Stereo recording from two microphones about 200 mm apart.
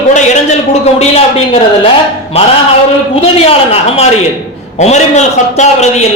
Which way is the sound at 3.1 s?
30° left (ahead or behind).